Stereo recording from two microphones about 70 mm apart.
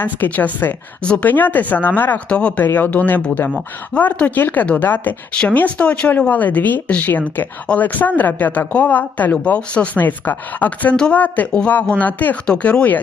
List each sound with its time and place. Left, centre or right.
0.0 s speech: left
12.5 s speech: centre